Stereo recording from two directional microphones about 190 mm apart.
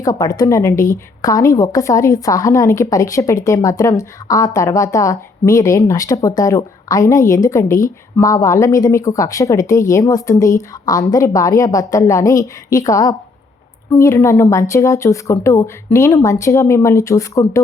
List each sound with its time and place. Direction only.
0.0 s a woman's voice: 20° left (ahead or behind)